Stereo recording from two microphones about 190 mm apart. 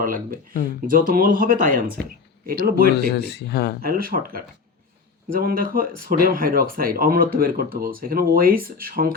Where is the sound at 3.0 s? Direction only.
60° left (ahead or behind).